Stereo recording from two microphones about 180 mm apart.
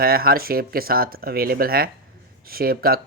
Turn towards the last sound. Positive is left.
turn(degrees=-55)  # may be behind; listen again after turning